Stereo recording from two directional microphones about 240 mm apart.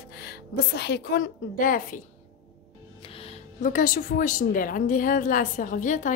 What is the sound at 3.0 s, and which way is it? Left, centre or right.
A woman's voice, left.